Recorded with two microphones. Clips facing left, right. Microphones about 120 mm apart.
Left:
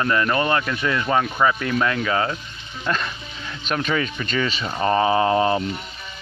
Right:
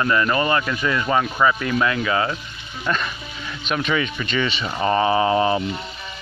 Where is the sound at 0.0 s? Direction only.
50° left (ahead or behind).